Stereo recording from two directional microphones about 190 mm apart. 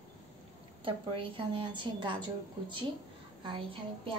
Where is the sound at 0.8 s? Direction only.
30° right (ahead or behind).